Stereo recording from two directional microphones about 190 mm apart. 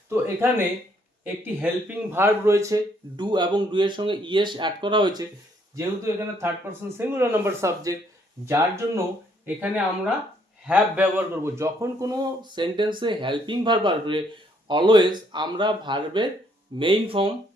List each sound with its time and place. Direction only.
0.1 s speech: 10° right (ahead or behind)
10.7 s speech: 10° right (ahead or behind); by 17.3 s 30° right (ahead or behind)